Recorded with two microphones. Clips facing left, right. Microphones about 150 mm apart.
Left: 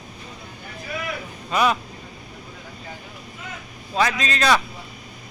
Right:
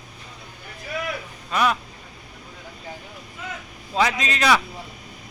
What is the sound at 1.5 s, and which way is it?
Speech, centre (ahead or behind).